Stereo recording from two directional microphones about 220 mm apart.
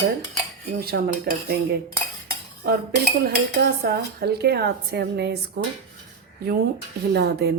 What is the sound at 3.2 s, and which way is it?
Speech, 45° right (ahead or behind).